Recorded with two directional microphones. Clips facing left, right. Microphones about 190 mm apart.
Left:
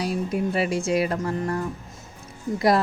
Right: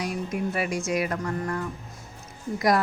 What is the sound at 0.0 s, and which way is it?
A woman's voice, 30° left (ahead or behind).